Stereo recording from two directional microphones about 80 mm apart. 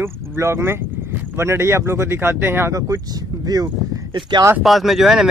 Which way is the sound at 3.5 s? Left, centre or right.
Right.